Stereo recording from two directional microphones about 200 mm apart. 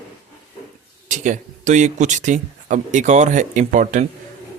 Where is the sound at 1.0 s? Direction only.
40° right (ahead or behind).